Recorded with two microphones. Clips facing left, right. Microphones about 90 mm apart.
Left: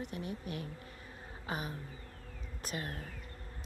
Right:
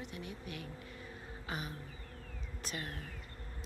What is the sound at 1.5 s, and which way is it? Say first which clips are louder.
Insect: left 3 dB; 40° left (ahead or behind).